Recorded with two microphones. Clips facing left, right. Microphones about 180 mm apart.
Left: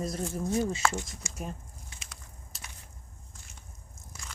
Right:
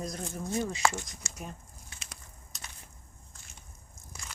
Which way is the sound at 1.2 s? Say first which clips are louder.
Left 3 dB; 15° left (ahead or behind).